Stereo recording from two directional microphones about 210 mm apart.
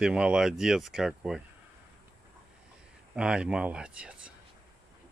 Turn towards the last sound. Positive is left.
turn(degrees=-5)  # may be behind; listen again after turning